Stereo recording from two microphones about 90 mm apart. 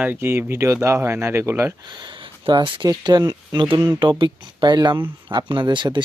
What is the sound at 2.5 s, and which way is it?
Speech, 65° right (ahead or behind).